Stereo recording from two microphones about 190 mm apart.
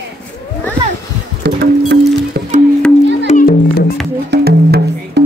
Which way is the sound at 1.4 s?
55° right (ahead or behind).